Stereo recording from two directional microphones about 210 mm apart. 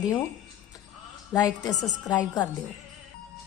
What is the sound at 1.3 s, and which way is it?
A woman's voice, 15° left (ahead or behind).